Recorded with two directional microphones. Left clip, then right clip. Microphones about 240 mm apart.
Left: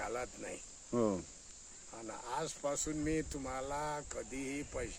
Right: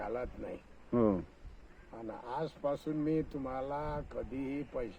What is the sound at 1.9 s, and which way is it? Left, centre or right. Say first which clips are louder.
Speech: right 1 dB; left.